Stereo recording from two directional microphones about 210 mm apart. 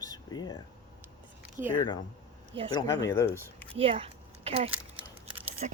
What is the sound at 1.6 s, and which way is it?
Speech, 10° right (ahead or behind).